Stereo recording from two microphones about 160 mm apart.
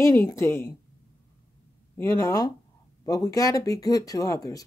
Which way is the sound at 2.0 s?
20° left (ahead or behind).